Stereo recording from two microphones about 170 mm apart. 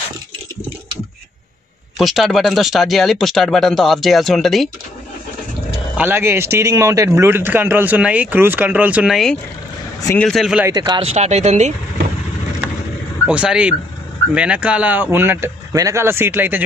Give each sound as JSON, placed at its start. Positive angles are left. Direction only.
{"t": 2.0, "sound": "speech", "side_deg": 0}
{"t": 5.9, "sound": "speech", "side_deg": -10}
{"t": 10.7, "sound": "speech", "side_deg": -20}
{"t": 11.1, "sound": "speech", "side_deg": -40}
{"t": 13.3, "sound": "speech", "side_deg": -5}